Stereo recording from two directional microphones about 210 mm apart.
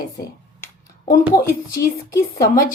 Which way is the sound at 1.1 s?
45° left (ahead or behind).